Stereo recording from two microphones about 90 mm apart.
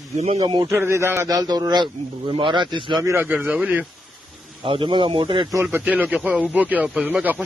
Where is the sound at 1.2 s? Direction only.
45° right (ahead or behind).